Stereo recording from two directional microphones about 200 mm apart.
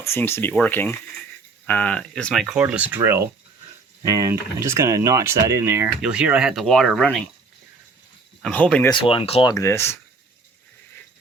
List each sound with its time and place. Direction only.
0.0 s speech: 10° left (ahead or behind)
8.4 s speech: 5° left (ahead or behind)
8.9 s speech: 25° left (ahead or behind)
9.5 s speech: 15° left (ahead or behind)